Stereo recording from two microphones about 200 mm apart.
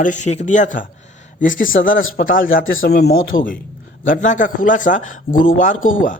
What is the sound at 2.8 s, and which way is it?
Speech, 55° left (ahead or behind).